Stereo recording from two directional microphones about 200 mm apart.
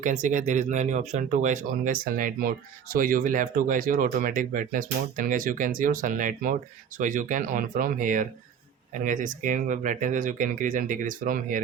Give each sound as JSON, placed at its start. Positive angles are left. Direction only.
{"t": 0.0, "sound": "speech", "side_deg": -40}